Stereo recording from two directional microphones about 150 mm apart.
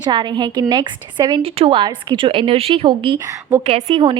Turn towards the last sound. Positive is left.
turn(degrees=-45)  # may be behind; listen again after turning